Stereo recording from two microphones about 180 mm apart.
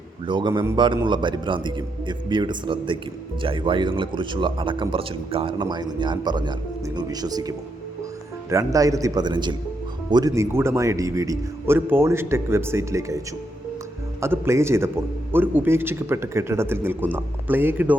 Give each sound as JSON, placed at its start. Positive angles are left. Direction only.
{"t": 0.3, "sound": "a man's voice", "side_deg": -25}